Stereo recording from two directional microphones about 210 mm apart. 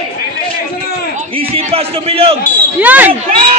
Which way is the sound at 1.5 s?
25° right (ahead or behind).